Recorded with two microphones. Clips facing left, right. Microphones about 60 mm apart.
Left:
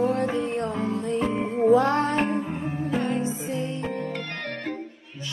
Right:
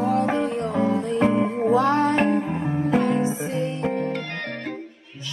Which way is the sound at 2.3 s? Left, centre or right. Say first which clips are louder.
Right 5 dB; right.